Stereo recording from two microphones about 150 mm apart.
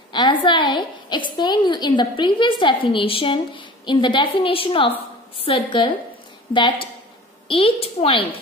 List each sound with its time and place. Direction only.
0.1 s a woman's voice: 30° left (ahead or behind)